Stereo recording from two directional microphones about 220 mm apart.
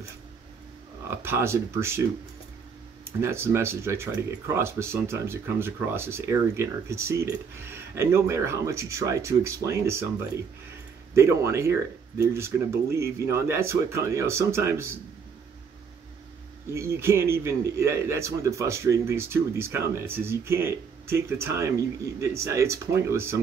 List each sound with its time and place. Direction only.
1.1 s speech: 10° right (ahead or behind)
3.2 s speech: 10° right (ahead or behind)
11.1 s speech: 10° right (ahead or behind)
16.7 s speech: 10° right (ahead or behind)